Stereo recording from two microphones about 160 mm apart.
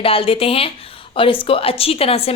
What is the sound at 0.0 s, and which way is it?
A woman's voice, 35° left (ahead or behind).